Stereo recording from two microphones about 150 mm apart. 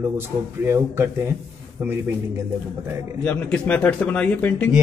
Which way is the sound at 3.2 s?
10° left (ahead or behind).